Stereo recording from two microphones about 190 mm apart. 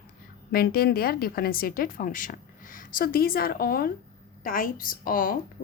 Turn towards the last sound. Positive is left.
turn(degrees=45)  # may be behind; listen again after turning